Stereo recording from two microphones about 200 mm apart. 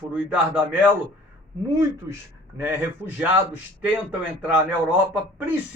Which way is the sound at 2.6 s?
10° right (ahead or behind).